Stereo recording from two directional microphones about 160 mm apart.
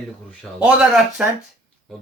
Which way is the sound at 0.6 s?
5° right (ahead or behind).